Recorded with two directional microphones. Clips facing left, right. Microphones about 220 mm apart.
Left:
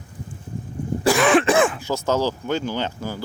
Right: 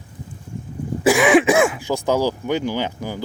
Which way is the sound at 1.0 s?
15° right (ahead or behind).